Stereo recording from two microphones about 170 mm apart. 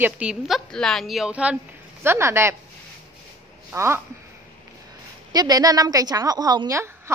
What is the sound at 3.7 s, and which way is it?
Speech, 15° right (ahead or behind).